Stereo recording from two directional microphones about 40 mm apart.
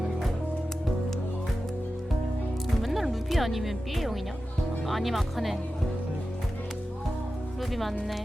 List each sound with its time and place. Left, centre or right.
2.8 s speech: centre